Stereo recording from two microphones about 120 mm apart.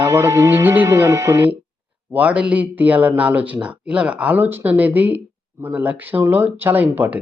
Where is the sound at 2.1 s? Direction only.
10° right (ahead or behind).